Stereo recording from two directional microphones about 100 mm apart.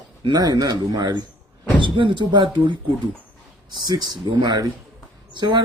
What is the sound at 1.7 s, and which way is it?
Speech, 55° right (ahead or behind).